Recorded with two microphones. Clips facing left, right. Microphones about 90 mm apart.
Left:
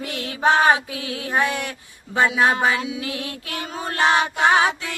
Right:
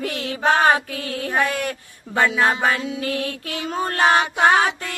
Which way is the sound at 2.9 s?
45° right (ahead or behind).